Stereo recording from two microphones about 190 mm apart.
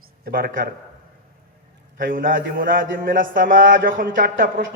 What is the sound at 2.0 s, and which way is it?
A man's voice, 50° right (ahead or behind).